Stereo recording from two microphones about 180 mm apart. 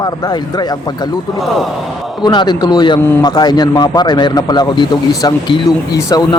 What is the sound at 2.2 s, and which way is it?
Speech, 25° left (ahead or behind).